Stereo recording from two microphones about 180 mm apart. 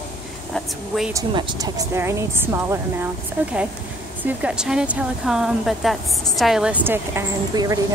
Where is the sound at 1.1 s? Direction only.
20° right (ahead or behind).